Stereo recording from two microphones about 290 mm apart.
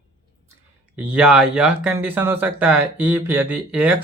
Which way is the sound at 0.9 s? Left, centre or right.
Centre.